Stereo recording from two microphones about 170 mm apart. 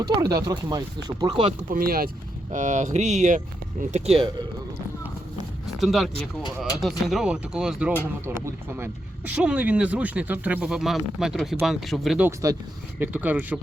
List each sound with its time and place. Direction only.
0.0 s speech: 20° right (ahead or behind)
1.7 s speech: 60° right (ahead or behind)
2.5 s speech: 45° right (ahead or behind)
5.8 s speech: centre (ahead or behind)